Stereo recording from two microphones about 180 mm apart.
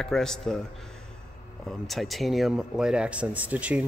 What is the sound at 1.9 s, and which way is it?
A man's voice, centre (ahead or behind).